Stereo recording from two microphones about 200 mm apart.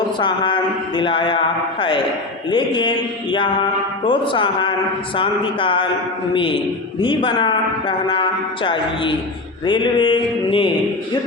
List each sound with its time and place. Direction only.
0.2 s speech: 25° left (ahead or behind)